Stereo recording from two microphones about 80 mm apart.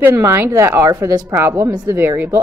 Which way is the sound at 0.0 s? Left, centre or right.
Right.